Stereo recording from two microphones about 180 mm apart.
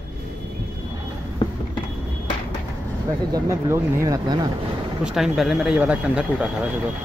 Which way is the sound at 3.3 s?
15° right (ahead or behind).